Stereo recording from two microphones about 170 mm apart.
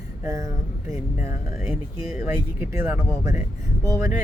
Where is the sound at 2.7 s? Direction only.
15° right (ahead or behind).